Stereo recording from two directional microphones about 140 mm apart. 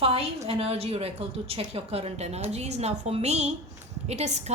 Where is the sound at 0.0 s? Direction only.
45° right (ahead or behind).